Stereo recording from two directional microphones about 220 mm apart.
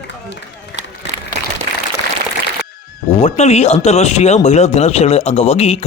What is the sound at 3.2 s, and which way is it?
A man's voice, 30° left (ahead or behind).